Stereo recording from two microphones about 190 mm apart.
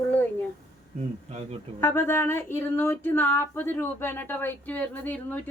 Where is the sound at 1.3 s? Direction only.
35° right (ahead or behind).